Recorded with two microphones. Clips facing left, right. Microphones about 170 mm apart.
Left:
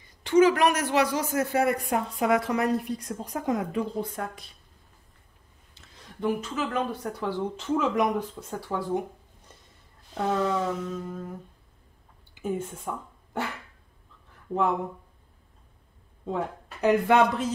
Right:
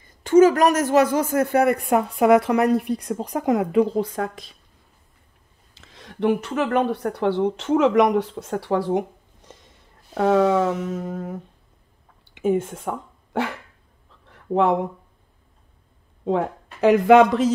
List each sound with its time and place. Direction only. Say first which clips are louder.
0.0 s a man's voice: right 6 dB; 45° right (ahead or behind); by 4.5 s 90° right
5.8 s speech: right 8 dB; 90° right
9.5 s a sound: right 9 dB; 90° right
10.1 s speech: right 9 dB; 85° right
14.3 s a sound: right 7 dB; 85° right
16.3 s speech: right 8 dB; 90° right